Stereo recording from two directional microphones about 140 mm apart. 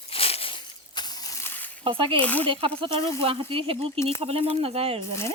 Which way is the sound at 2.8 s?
40° right (ahead or behind).